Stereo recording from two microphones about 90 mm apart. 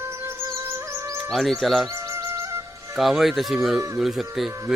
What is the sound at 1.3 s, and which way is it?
Speech, centre (ahead or behind).